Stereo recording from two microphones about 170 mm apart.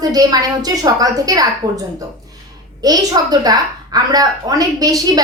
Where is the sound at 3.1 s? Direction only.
25° right (ahead or behind).